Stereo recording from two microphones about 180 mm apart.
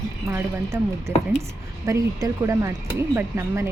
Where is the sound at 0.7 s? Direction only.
15° right (ahead or behind).